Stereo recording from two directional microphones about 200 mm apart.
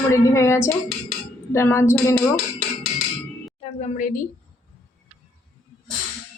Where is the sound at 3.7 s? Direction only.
40° left (ahead or behind).